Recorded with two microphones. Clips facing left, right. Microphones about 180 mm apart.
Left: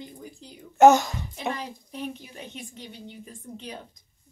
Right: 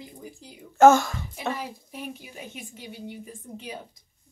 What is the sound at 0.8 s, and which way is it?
Speech, 20° left (ahead or behind).